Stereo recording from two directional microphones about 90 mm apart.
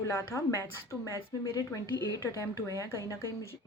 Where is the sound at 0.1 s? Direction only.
30° left (ahead or behind).